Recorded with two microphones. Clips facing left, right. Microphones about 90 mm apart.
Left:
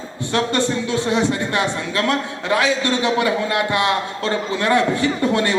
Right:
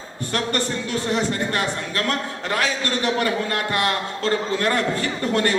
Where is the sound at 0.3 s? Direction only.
20° left (ahead or behind).